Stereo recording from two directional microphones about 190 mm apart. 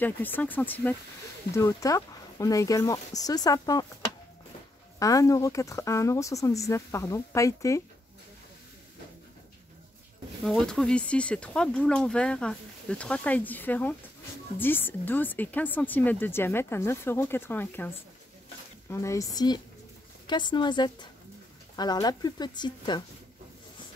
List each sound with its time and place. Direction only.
0.0 s speech: 10° left (ahead or behind)
4.9 s speech: 15° left (ahead or behind)
10.4 s speech: centre (ahead or behind); by 23.0 s 20° left (ahead or behind)